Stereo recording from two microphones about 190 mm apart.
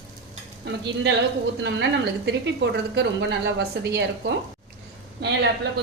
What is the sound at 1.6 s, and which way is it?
Speech, 65° right (ahead or behind).